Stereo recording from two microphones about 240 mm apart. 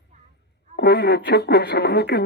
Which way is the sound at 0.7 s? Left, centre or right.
Left.